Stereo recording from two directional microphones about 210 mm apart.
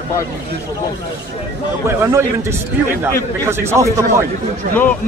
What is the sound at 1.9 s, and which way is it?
A man's voice, 10° right (ahead or behind).